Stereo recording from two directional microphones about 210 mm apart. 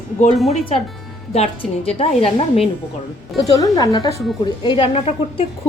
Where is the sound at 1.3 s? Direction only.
30° left (ahead or behind).